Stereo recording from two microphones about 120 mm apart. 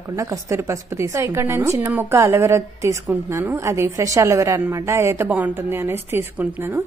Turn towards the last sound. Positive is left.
turn(degrees=-15)  # may be behind; listen again after turning